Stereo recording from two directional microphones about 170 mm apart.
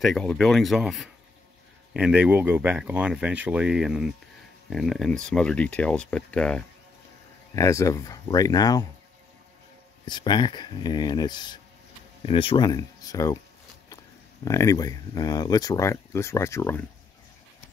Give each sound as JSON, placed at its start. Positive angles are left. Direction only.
{"t": 0.0, "sound": "speech", "side_deg": 5}
{"t": 7.5, "sound": "speech", "side_deg": 20}
{"t": 10.0, "sound": "speech", "side_deg": 25}
{"t": 14.4, "sound": "speech", "side_deg": 20}